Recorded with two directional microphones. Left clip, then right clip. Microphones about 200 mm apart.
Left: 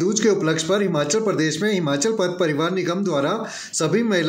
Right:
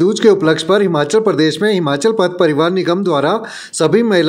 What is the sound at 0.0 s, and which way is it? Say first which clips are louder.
Speech: right 8 dB; 35° right (ahead or behind).